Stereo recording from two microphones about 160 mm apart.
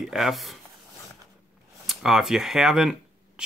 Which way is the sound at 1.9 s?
5° right (ahead or behind).